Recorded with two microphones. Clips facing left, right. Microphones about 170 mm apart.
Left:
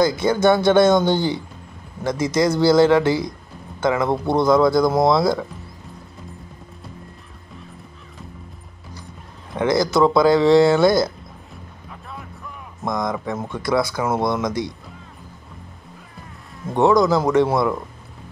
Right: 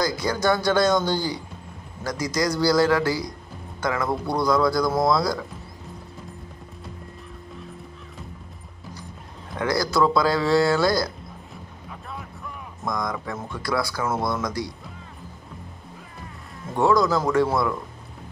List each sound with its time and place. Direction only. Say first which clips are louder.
0.0 s speech: left 7 dB; 25° left (ahead or behind)
9.6 s speech: left 5 dB; 20° left (ahead or behind)
12.1 s vehicle: even; centre (ahead or behind)
12.8 s speech: left 5 dB; 20° left (ahead or behind)
16.7 s speech: left 4 dB; 20° left (ahead or behind)